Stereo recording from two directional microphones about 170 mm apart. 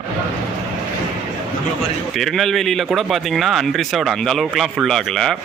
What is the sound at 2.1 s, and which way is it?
Speech, centre (ahead or behind).